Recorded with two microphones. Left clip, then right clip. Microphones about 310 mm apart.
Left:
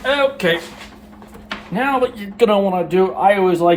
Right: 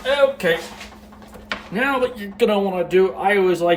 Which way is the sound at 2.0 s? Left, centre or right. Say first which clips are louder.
Left 3 dB; centre.